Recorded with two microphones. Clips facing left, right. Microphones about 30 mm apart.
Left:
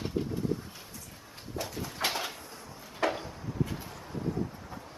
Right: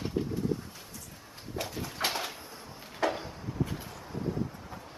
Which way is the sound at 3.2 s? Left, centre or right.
Centre.